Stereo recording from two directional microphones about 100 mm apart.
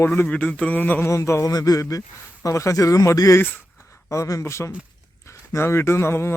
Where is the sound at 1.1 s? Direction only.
30° left (ahead or behind).